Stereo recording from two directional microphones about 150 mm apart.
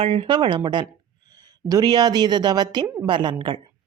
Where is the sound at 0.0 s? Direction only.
40° right (ahead or behind).